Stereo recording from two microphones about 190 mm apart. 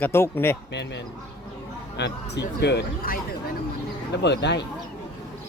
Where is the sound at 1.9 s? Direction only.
65° left (ahead or behind).